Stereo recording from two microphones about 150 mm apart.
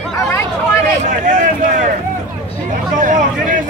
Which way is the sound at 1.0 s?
55° right (ahead or behind).